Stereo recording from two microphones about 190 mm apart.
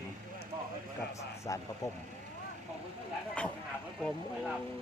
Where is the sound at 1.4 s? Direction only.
15° left (ahead or behind).